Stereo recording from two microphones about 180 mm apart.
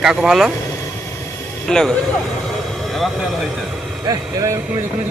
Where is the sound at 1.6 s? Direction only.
5° left (ahead or behind).